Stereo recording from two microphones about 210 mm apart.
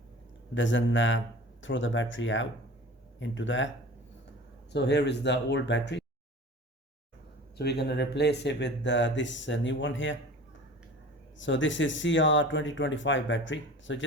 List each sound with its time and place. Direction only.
0.5 s speech: 60° left (ahead or behind)
4.7 s speech: 55° left (ahead or behind)
7.6 s speech: 50° left (ahead or behind)
11.3 s speech: 60° left (ahead or behind)